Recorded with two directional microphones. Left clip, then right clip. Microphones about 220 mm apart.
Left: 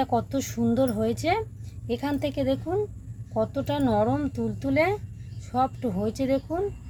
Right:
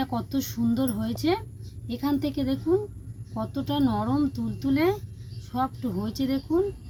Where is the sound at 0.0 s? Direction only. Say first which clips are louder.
Left 4 dB; 40° left (ahead or behind).